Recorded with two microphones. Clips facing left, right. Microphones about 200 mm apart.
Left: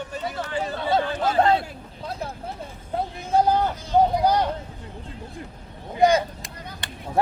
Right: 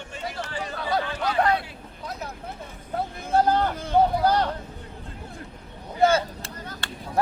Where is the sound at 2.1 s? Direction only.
30° left (ahead or behind).